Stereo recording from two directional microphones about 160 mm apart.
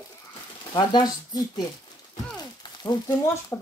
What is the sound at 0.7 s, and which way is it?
Speech, 25° left (ahead or behind).